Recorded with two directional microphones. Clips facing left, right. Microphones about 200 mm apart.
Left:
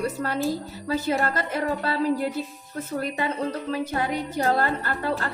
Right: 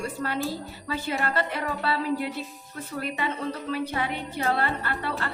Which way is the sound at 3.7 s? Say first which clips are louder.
Left 1 dB; 40° left (ahead or behind).